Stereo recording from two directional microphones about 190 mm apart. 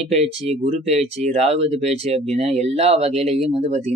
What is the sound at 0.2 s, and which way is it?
Speech, 35° right (ahead or behind).